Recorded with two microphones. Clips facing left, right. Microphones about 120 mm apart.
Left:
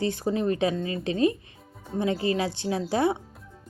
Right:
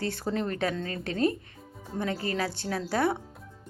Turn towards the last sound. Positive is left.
turn(degrees=20)  # may be behind; listen again after turning